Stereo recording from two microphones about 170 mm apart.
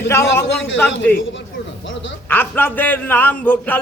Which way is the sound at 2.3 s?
10° left (ahead or behind).